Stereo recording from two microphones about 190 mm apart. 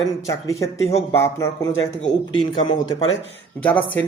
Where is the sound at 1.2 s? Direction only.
15° left (ahead or behind).